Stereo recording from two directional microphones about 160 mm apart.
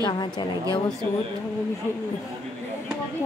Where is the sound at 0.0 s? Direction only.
25° left (ahead or behind).